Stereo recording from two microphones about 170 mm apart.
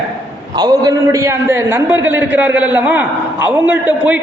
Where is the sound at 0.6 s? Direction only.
20° right (ahead or behind).